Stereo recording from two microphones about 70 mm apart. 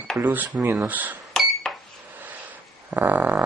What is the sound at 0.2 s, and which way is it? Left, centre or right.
Speech, right.